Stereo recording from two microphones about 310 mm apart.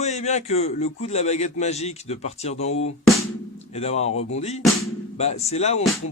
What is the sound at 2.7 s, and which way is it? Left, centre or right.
Music, left.